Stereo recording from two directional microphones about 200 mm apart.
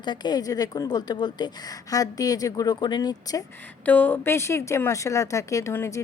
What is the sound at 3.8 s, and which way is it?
Speech, 10° left (ahead or behind).